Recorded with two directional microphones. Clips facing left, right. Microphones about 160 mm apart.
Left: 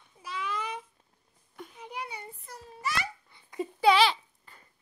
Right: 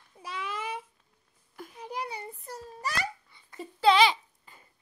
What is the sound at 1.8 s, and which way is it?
A child's voice, 35° right (ahead or behind).